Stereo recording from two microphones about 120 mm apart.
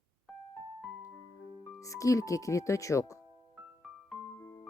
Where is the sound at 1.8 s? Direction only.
25° left (ahead or behind).